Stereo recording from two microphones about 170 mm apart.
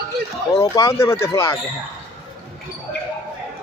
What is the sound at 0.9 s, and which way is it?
Speech, 15° left (ahead or behind).